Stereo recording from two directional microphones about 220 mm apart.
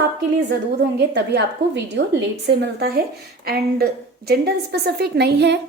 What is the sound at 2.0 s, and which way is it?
A woman's voice, 50° right (ahead or behind).